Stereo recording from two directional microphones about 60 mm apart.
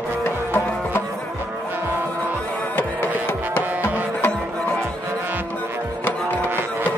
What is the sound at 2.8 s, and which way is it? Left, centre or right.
Music, left.